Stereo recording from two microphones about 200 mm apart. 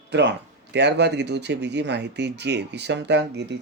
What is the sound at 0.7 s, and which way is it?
Speech, 60° right (ahead or behind).